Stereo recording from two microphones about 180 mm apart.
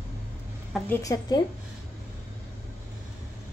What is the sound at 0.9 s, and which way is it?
Speech, 20° left (ahead or behind).